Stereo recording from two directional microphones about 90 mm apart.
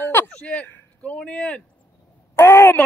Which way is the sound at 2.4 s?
25° left (ahead or behind).